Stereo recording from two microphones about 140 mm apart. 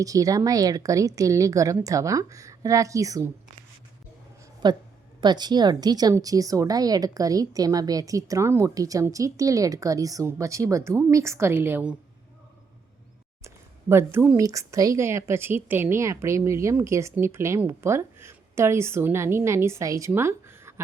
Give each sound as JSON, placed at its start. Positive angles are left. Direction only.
{"t": 0.0, "sound": "a woman's voice", "side_deg": -25}
{"t": 4.6, "sound": "a woman's voice", "side_deg": -30}
{"t": 13.4, "sound": "a sound", "side_deg": -20}
{"t": 14.4, "sound": "a woman's voice", "side_deg": -20}